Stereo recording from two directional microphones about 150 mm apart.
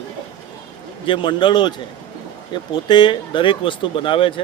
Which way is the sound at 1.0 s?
35° left (ahead or behind).